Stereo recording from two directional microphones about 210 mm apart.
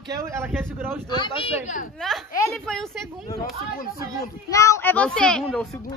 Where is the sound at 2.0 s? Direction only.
5° left (ahead or behind).